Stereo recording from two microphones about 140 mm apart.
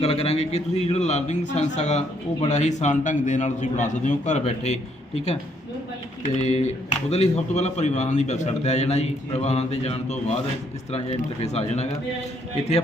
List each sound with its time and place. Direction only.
0.0 s a man's voice: 45° left (ahead or behind)